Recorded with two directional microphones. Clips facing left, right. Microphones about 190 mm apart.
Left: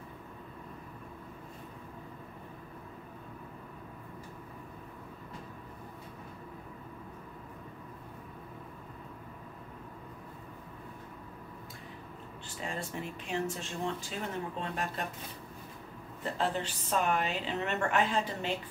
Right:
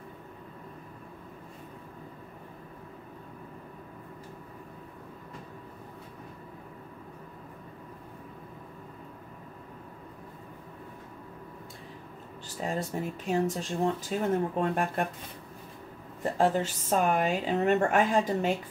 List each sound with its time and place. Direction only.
12.5 s speech: 40° right (ahead or behind)
14.6 s speech: 55° right (ahead or behind)
16.2 s a woman's voice: 45° right (ahead or behind)